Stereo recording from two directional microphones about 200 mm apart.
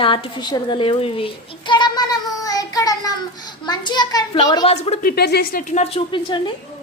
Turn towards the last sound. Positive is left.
turn(degrees=20)  # may be behind; listen again after turning